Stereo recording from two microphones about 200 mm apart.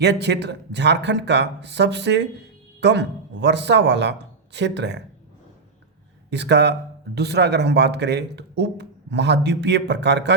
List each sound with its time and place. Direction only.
0.0 s speech: 60° right (ahead or behind)
6.3 s speech: 60° right (ahead or behind)